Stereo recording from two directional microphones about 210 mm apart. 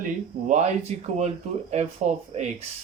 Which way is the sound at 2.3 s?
30° right (ahead or behind).